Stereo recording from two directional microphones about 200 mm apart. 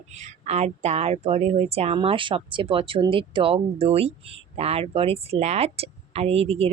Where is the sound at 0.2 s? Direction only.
35° right (ahead or behind).